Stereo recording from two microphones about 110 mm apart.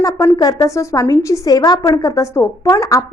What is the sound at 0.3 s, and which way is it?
A woman's voice, 30° left (ahead or behind).